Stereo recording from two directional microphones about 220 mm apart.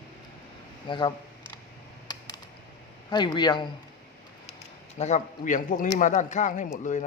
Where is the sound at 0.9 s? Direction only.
20° left (ahead or behind).